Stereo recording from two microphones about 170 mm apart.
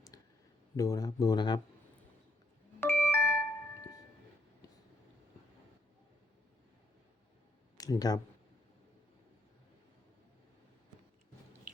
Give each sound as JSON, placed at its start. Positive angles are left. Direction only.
{"t": 0.1, "sound": "clicking", "side_deg": 20}
{"t": 0.8, "sound": "speech", "side_deg": 20}
{"t": 2.8, "sound": "music", "side_deg": 15}
{"t": 7.8, "sound": "speech", "side_deg": 20}